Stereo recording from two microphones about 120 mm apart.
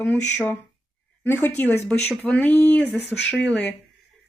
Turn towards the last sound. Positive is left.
turn(degrees=10)  # may be behind; listen again after turning